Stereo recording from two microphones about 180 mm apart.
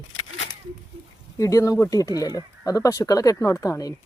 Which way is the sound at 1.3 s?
20° left (ahead or behind).